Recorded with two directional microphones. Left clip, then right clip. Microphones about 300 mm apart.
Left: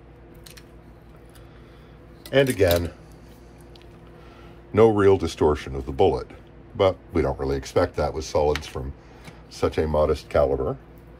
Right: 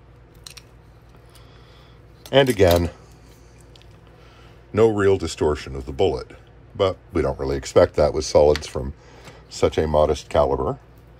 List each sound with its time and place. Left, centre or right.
2.2 s speech: centre
4.7 s speech: centre